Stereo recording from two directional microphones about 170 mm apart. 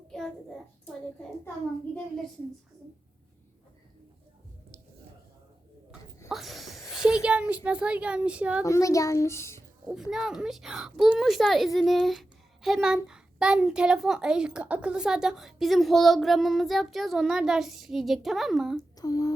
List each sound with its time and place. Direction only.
0.1 s child singing: centre (ahead or behind)
6.2 s a sound: centre (ahead or behind)
7.3 s speech: 5° right (ahead or behind)
8.6 s a child's voice: 20° left (ahead or behind)
9.9 s a woman's voice: centre (ahead or behind)
18.8 s speech: 20° left (ahead or behind)